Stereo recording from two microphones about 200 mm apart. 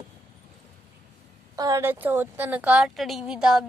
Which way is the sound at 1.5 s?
15° right (ahead or behind).